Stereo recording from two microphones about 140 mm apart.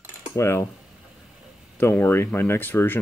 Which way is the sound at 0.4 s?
20° left (ahead or behind).